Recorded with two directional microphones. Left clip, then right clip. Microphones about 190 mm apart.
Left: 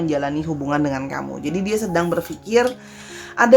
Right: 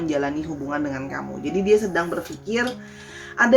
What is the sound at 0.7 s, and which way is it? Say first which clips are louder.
A woman's voice: left 6 dB; 50° left (ahead or behind).